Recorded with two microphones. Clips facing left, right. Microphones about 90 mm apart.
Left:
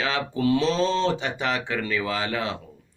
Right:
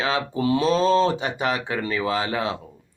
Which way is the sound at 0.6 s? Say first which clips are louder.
Right 4 dB; 45° right (ahead or behind).